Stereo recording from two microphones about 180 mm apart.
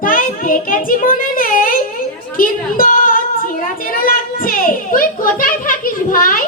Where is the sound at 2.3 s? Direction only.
50° left (ahead or behind).